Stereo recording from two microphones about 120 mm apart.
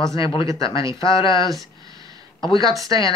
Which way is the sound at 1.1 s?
30° right (ahead or behind).